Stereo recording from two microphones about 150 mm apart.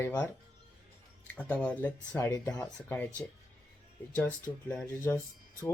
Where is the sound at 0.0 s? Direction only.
15° left (ahead or behind).